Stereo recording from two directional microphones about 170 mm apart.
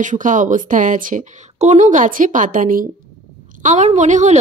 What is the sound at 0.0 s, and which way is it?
A woman's voice, 50° right (ahead or behind).